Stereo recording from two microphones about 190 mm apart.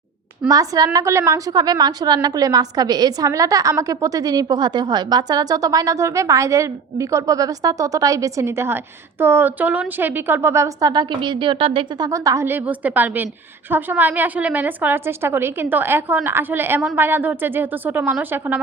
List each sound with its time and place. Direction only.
0.4 s a woman's voice: 20° right (ahead or behind)